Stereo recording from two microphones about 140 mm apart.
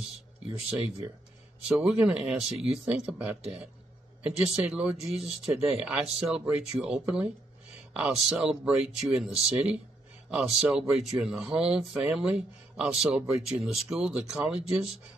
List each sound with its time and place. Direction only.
2.0 s speech: 5° right (ahead or behind)
2.5 s speech: 45° right (ahead or behind)
2.8 s speech: 5° right (ahead or behind)